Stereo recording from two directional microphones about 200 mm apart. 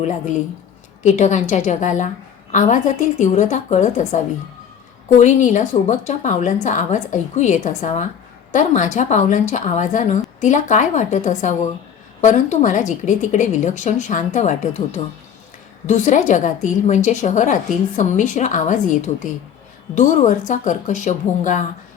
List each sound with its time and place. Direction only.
1.0 s a woman's voice: 35° left (ahead or behind)